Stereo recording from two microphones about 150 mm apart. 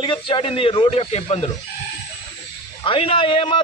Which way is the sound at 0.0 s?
35° left (ahead or behind).